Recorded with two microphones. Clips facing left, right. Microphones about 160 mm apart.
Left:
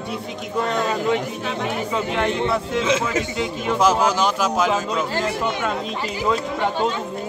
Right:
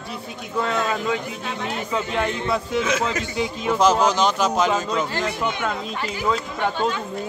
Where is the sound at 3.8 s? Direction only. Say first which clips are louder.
Even; 10° left (ahead or behind).